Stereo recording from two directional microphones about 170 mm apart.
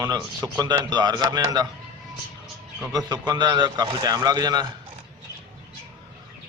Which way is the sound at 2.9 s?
25° right (ahead or behind).